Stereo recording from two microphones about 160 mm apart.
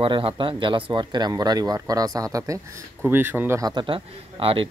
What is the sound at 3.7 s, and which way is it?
Speech, 30° right (ahead or behind).